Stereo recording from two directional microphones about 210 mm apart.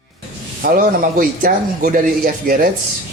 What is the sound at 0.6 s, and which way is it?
Speech, 40° right (ahead or behind).